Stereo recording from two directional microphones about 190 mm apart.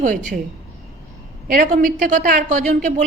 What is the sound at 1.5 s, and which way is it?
A woman's voice, 45° right (ahead or behind).